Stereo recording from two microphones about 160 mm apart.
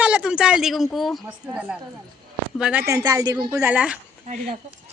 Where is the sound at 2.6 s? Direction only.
5° right (ahead or behind).